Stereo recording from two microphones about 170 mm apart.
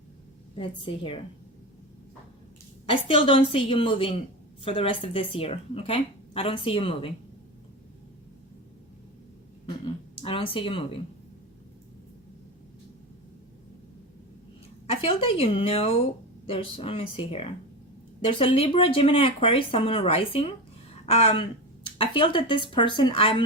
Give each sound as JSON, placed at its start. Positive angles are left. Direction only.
{"t": 0.5, "sound": "speech", "side_deg": 35}
{"t": 2.9, "sound": "speech", "side_deg": 30}
{"t": 10.2, "sound": "speech", "side_deg": 35}
{"t": 14.8, "sound": "speech", "side_deg": 35}